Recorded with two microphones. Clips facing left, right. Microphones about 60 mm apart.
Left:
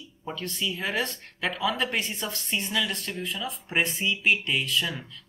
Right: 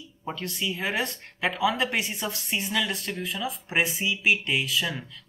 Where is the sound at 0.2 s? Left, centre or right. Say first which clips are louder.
Even; centre.